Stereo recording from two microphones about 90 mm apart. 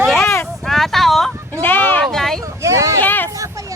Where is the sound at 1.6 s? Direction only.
20° left (ahead or behind).